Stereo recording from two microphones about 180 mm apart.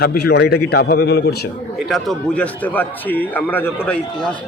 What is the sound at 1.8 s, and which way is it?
A man's voice, centre (ahead or behind).